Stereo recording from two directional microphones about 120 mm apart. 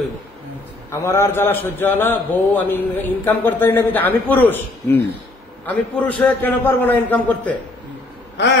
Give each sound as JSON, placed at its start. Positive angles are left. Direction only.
{"t": 1.0, "sound": "a man's voice", "side_deg": 25}